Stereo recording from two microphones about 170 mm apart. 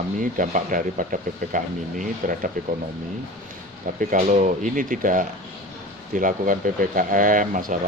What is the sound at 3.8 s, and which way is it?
Speech, 50° right (ahead or behind).